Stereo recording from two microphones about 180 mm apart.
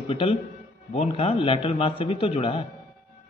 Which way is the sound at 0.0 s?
35° left (ahead or behind).